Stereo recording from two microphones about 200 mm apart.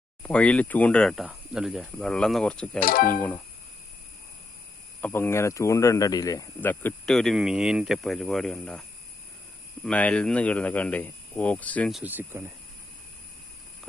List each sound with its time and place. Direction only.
0.2 s speech: 5° left (ahead or behind)
2.8 s speech: 45° left (ahead or behind)
4.9 s speech: 10° left (ahead or behind)
9.8 s speech: 5° left (ahead or behind)